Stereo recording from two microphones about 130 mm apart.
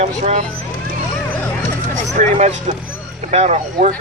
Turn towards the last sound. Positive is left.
turn(degrees=-65)  # may be behind; listen again after turning